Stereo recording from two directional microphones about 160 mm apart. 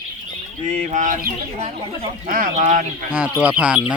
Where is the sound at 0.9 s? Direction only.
50° right (ahead or behind).